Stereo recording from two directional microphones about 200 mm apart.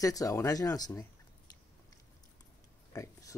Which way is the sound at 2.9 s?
15° left (ahead or behind).